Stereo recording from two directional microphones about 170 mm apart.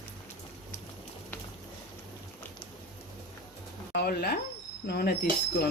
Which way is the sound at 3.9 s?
70° left (ahead or behind).